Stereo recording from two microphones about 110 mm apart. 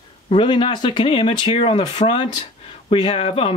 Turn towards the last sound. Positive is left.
turn(degrees=60)  # may be behind; listen again after turning